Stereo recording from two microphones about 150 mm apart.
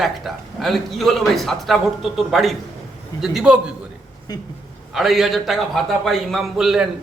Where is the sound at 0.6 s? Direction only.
Centre (ahead or behind).